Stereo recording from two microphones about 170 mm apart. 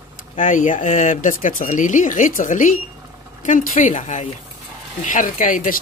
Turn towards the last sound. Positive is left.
turn(degrees=50)  # may be behind; listen again after turning